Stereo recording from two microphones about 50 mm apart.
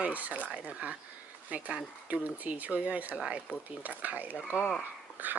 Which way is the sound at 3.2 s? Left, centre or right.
Centre.